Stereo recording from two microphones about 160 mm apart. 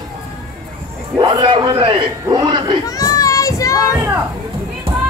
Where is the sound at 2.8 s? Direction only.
20° left (ahead or behind).